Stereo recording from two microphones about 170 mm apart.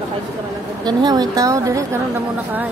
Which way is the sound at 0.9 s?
25° right (ahead or behind).